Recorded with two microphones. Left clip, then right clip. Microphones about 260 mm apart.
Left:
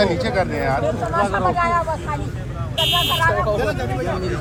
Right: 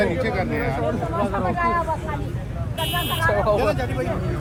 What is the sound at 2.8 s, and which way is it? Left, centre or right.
Vehicle, left.